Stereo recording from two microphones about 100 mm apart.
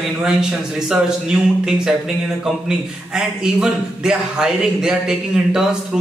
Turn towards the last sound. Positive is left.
turn(degrees=-5)  # may be behind; listen again after turning